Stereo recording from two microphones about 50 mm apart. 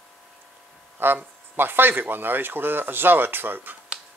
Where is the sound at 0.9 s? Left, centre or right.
Right.